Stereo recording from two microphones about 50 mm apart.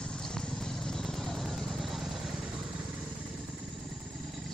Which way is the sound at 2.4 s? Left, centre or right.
Right.